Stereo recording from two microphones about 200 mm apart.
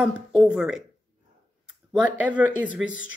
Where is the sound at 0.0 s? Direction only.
5° right (ahead or behind).